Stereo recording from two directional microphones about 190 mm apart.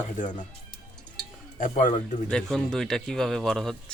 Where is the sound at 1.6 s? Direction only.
45° left (ahead or behind).